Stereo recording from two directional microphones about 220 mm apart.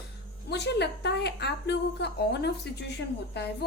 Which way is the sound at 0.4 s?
50° left (ahead or behind).